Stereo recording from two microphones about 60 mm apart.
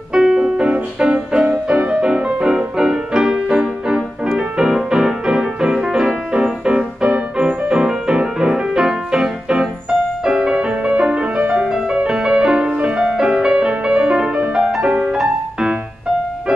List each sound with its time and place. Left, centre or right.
0.1 s music: centre
14.5 s music: centre